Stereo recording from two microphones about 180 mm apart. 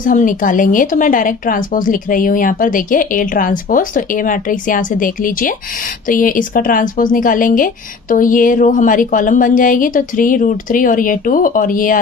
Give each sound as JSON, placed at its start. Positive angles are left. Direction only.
{"t": 0.0, "sound": "a woman's voice", "side_deg": 45}